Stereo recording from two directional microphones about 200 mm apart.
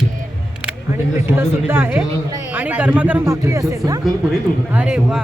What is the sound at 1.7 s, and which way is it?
Speech, 10° right (ahead or behind).